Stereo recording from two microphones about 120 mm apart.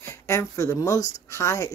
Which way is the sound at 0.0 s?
25° left (ahead or behind).